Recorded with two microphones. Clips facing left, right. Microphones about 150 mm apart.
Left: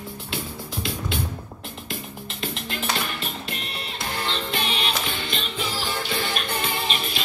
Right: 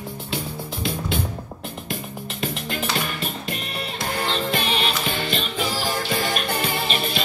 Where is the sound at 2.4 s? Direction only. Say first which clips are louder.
Right 3 dB; 40° right (ahead or behind).